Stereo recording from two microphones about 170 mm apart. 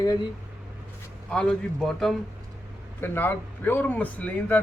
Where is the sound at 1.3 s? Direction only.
5° left (ahead or behind).